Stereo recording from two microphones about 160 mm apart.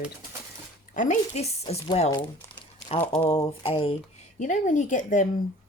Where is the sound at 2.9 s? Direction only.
40° left (ahead or behind).